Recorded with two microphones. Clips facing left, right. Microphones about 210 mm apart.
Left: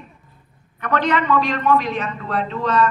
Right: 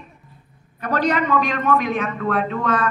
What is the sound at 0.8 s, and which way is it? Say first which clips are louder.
A man's voice: even; 35° right (ahead or behind).